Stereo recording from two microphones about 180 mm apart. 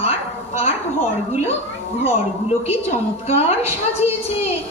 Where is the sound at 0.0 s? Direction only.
35° left (ahead or behind).